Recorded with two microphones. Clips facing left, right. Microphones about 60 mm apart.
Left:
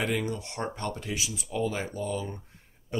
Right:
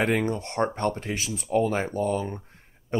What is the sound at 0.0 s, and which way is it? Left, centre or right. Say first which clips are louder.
Speech: right 5 dB; right.